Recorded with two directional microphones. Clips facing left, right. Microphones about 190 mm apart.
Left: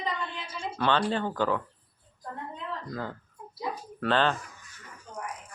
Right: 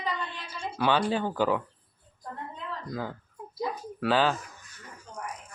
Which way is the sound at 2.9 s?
5° right (ahead or behind).